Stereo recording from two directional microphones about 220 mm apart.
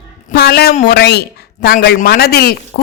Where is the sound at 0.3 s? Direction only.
45° left (ahead or behind).